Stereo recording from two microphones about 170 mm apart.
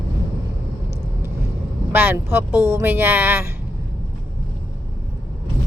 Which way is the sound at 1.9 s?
10° right (ahead or behind).